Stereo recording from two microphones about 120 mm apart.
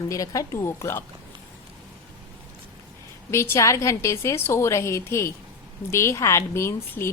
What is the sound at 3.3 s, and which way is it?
A woman's voice, 25° left (ahead or behind).